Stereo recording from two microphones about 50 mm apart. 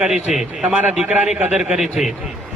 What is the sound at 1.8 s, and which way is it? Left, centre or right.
Speech, centre.